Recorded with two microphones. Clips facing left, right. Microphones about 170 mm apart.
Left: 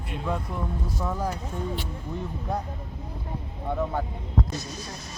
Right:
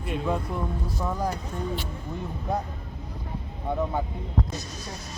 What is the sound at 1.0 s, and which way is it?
Speech, centre (ahead or behind).